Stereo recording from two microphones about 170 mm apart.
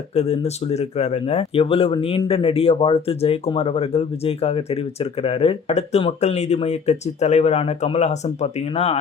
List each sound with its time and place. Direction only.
0.2 s speech: 40° left (ahead or behind)